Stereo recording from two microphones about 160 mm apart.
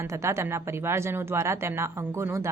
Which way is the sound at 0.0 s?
20° right (ahead or behind).